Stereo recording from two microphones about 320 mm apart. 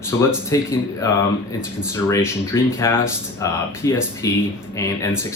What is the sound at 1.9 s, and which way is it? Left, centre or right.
Speech, centre.